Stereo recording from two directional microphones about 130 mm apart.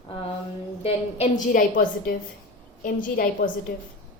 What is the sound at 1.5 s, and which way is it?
A woman's voice, 90° left.